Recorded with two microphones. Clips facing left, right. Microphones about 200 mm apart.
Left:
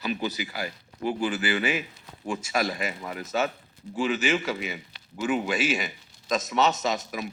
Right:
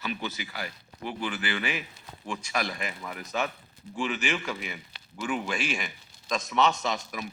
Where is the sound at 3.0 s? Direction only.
25° left (ahead or behind).